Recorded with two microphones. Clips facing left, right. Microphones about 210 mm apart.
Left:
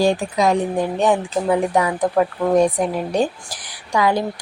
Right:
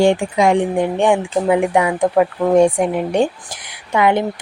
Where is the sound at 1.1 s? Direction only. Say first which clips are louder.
Right 3 dB; 10° right (ahead or behind).